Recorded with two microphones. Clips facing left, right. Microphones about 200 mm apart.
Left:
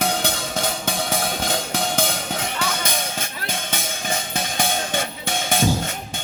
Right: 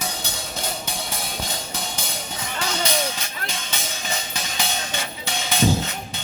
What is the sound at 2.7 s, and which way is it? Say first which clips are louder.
Music: right 2 dB; 50° left (ahead or behind).